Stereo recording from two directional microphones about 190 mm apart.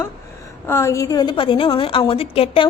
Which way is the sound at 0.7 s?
15° left (ahead or behind).